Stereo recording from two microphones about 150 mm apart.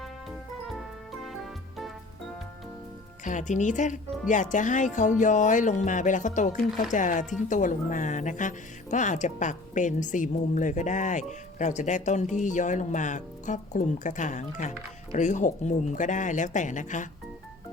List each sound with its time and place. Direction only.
0.0 s music: centre (ahead or behind)
3.2 s speech: 55° left (ahead or behind)